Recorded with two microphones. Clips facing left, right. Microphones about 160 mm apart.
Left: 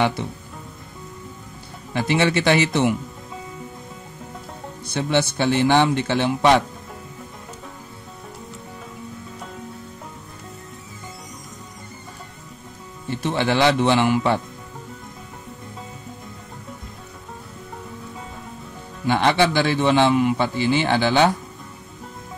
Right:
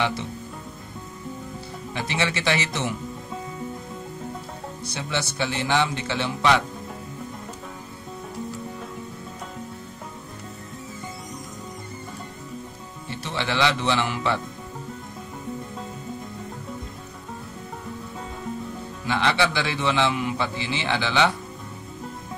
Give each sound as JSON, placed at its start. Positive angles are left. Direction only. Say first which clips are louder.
{"t": 2.0, "sound": "speech", "louder": "left 8 dB", "side_deg": 55}
{"t": 4.8, "sound": "a man's voice", "louder": "left 9 dB", "side_deg": 55}
{"t": 13.2, "sound": "a man's voice", "louder": "left 5 dB", "side_deg": 50}
{"t": 19.0, "sound": "a man's voice", "louder": "left 5 dB", "side_deg": 50}